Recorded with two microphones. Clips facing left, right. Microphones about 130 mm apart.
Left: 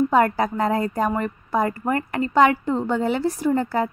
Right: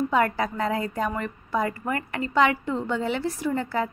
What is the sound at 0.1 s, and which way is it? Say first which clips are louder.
A woman's voice: left 4 dB; 40° left (ahead or behind).